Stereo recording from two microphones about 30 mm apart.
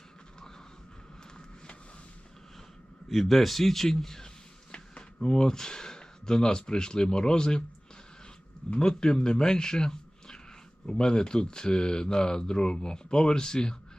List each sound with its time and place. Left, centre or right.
3.1 s a man's voice: centre
4.7 s speech: left
8.8 s speech: left